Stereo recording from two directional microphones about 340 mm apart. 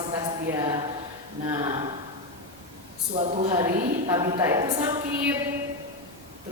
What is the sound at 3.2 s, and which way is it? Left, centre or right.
Speech, centre.